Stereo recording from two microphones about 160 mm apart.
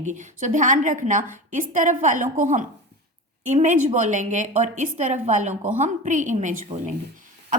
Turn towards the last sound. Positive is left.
turn(degrees=-30)  # may be behind; listen again after turning